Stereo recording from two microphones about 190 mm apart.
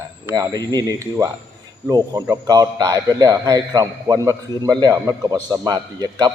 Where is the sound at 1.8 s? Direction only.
20° right (ahead or behind).